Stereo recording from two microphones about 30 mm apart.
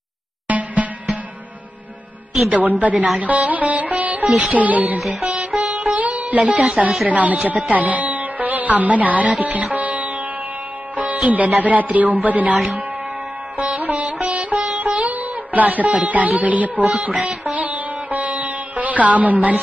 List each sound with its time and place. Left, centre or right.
0.5 s music: right
2.5 s music: right
4.4 s speech: right
5.2 s music: right
5.9 s music: right
7.1 s speech: right
11.0 s music: right
13.7 s music: right
15.1 s speech: right
17.2 s music: right